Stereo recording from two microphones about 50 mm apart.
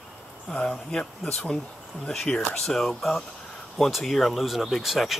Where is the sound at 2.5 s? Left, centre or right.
Centre.